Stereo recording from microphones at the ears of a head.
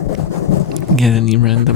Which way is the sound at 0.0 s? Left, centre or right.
Left.